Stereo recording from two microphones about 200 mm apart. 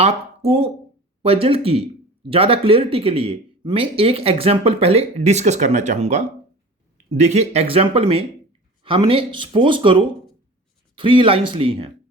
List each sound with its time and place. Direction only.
0.0 s speech: 30° right (ahead or behind)